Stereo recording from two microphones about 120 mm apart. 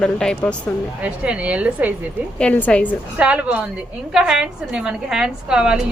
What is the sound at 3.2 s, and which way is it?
A woman's voice, 10° right (ahead or behind).